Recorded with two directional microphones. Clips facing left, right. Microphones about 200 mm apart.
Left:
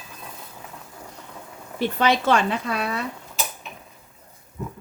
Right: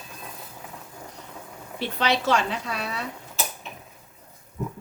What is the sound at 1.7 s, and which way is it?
Speech, 50° left (ahead or behind).